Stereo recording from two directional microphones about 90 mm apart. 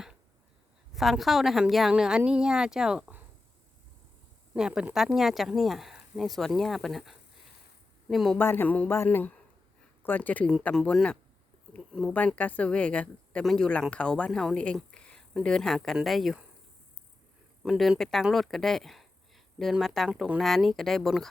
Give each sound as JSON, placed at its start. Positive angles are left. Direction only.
{"t": 0.9, "sound": "a woman's voice", "side_deg": 0}
{"t": 4.5, "sound": "speech", "side_deg": -10}
{"t": 8.4, "sound": "a woman's voice", "side_deg": 20}
{"t": 12.4, "sound": "a woman's voice", "side_deg": 15}
{"t": 13.4, "sound": "speech", "side_deg": 5}
{"t": 17.6, "sound": "speech", "side_deg": 0}